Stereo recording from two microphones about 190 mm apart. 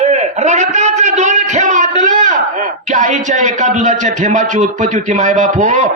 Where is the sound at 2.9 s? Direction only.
40° right (ahead or behind).